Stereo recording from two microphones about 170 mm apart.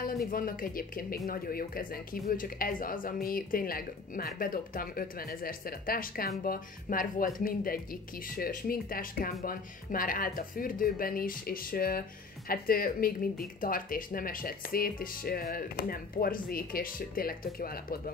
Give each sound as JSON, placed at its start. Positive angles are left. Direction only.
{"t": 0.0, "sound": "speech", "side_deg": 60}